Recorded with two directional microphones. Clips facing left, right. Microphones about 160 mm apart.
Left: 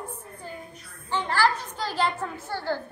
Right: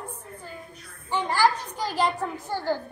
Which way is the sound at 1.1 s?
15° right (ahead or behind).